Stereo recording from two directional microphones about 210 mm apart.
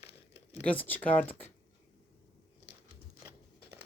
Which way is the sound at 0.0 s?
30° left (ahead or behind).